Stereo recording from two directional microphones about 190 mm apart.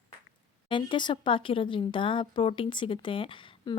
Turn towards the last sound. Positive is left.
turn(degrees=25)  # may be behind; listen again after turning